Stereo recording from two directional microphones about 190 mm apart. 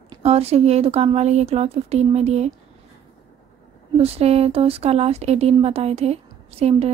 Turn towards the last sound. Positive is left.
turn(degrees=-30)  # may be behind; listen again after turning